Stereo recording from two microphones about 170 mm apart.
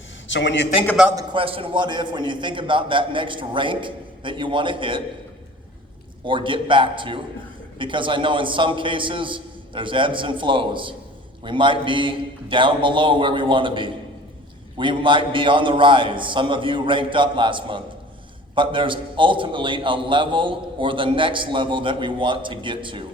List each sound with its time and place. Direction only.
0.3 s a man's voice: 90° left
1.1 s a man's voice: 30° right (ahead or behind)
6.2 s a man's voice: 30° right (ahead or behind)